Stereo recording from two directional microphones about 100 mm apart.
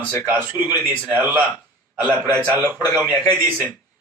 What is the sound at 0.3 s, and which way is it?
A man's voice, 20° right (ahead or behind).